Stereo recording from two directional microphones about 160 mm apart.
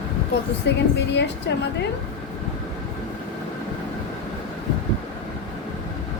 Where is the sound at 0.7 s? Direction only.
90° left.